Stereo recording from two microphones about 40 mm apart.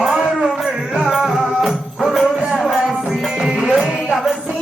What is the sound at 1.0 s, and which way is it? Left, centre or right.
Music, centre.